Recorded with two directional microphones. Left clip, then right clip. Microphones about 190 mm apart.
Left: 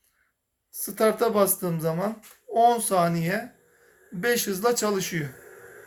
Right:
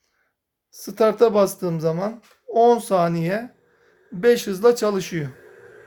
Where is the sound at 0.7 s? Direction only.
55° right (ahead or behind).